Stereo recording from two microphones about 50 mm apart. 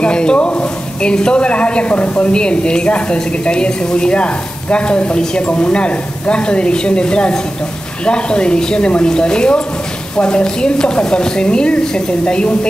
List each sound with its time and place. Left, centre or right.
0.0 s a woman's voice: centre